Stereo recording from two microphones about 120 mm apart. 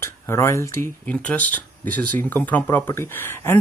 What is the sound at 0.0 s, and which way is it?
Speech, 20° left (ahead or behind).